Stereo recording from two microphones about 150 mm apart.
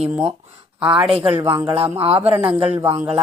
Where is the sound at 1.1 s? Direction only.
40° right (ahead or behind).